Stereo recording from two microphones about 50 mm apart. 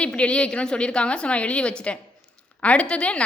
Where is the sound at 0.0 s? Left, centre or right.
Left.